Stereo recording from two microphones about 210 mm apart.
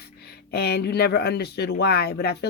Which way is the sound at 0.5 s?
50° left (ahead or behind).